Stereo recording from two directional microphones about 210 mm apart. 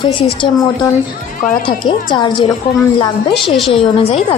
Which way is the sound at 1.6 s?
20° left (ahead or behind).